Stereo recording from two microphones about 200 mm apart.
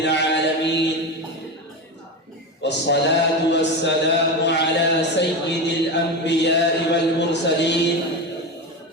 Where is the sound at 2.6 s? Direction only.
60° left (ahead or behind).